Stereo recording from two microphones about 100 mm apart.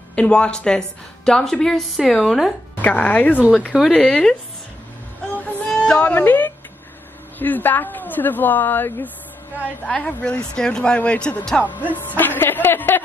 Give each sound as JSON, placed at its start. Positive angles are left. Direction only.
{"t": 0.1, "sound": "a woman's voice", "side_deg": 10}
{"t": 2.8, "sound": "speech", "side_deg": 15}
{"t": 3.7, "sound": "a woman's voice", "side_deg": -5}
{"t": 5.3, "sound": "music", "side_deg": 15}
{"t": 7.3, "sound": "speech", "side_deg": 20}